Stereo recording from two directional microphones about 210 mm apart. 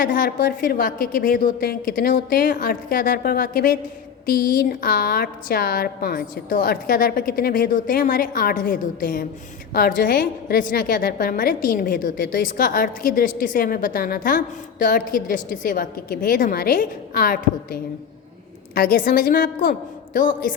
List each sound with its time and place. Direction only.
0.0 s a woman's voice: 40° left (ahead or behind)